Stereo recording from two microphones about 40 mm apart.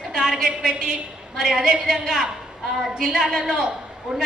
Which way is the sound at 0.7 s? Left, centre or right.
Centre.